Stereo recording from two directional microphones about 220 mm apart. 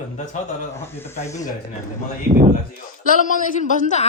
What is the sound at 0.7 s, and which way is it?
Speech, 10° left (ahead or behind).